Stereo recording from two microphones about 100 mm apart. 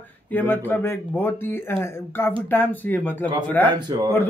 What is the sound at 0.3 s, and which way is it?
A man's voice, 20° left (ahead or behind).